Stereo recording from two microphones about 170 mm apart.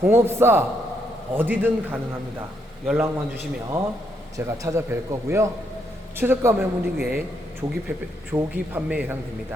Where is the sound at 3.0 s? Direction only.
15° right (ahead or behind).